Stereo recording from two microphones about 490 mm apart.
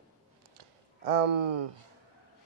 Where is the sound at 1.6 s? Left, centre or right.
Right.